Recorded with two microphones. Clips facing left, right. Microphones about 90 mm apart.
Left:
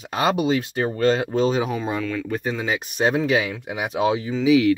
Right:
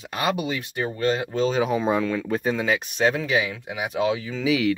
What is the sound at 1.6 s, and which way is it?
Speech, 15° right (ahead or behind).